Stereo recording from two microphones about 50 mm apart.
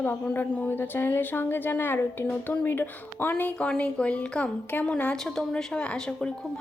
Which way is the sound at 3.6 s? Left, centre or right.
Left.